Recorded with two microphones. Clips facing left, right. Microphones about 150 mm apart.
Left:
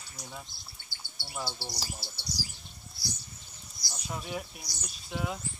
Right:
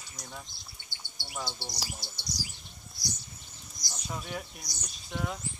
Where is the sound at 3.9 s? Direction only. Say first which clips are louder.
Left 1 dB; 5° left (ahead or behind).